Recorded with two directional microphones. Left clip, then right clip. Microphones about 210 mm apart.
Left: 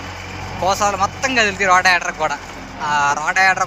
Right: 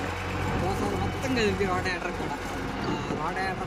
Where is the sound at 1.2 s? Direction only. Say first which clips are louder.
Left 8 dB; centre (ahead or behind).